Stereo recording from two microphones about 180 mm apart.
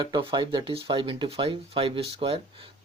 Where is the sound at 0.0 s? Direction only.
25° right (ahead or behind).